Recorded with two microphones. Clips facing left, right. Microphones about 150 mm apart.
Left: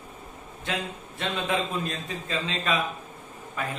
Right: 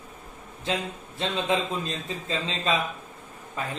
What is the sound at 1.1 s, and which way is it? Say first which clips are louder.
A man's voice: right 2 dB; 25° right (ahead or behind).